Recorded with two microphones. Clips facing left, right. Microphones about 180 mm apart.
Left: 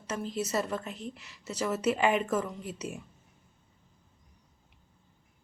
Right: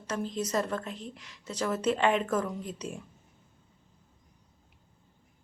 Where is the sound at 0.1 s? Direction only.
5° left (ahead or behind).